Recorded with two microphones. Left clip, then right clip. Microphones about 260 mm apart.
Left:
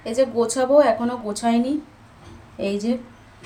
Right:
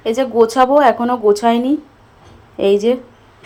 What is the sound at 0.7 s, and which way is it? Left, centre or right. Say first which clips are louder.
Speech: right 5 dB; right.